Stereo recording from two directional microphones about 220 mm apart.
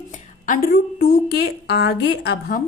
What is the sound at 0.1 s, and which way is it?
A woman's voice, 35° left (ahead or behind).